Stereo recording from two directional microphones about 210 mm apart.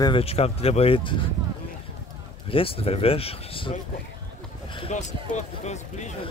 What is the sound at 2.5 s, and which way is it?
Speech, 25° left (ahead or behind).